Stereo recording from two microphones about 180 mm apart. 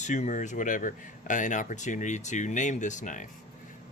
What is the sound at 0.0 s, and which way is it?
Speech, 40° left (ahead or behind).